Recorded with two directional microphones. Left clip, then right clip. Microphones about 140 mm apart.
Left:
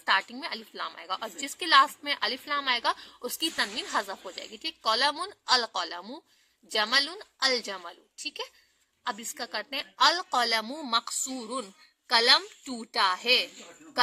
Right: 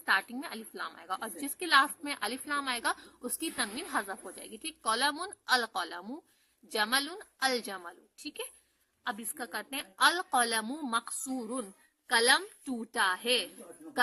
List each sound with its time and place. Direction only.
0.0 s a woman's voice: 20° left (ahead or behind)